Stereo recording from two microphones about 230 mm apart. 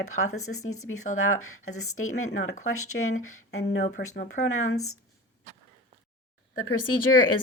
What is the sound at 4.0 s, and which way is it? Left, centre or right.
Speech, left.